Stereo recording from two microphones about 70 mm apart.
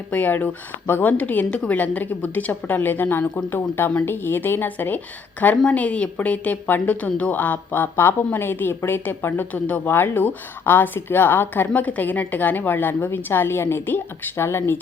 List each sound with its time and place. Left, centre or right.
0.1 s a woman's voice: left